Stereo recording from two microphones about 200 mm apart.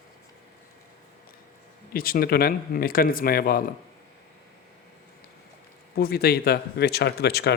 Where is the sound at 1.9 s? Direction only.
45° left (ahead or behind).